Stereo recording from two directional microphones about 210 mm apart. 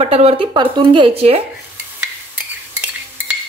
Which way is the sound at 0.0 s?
25° right (ahead or behind).